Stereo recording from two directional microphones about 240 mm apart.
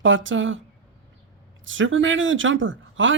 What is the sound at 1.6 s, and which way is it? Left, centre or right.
Speech, right.